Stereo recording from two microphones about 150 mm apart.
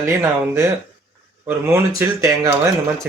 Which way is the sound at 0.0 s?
20° right (ahead or behind).